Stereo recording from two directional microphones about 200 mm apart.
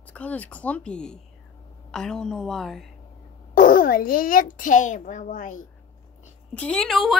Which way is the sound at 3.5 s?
45° left (ahead or behind).